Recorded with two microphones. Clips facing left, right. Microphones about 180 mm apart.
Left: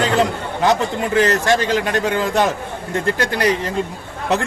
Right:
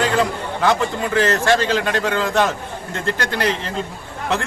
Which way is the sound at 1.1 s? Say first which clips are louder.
Left 1 dB; 15° left (ahead or behind).